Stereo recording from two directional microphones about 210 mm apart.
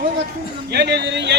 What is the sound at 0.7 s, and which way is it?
Speech, 50° right (ahead or behind).